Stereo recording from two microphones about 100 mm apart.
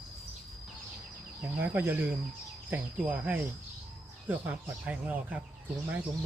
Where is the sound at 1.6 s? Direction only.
20° right (ahead or behind).